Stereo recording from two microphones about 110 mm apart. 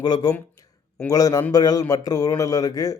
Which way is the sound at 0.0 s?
40° left (ahead or behind).